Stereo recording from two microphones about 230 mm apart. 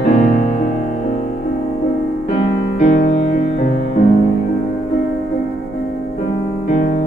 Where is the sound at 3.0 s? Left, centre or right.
Left.